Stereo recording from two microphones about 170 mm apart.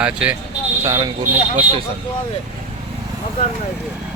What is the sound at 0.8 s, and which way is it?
Speech, 20° right (ahead or behind).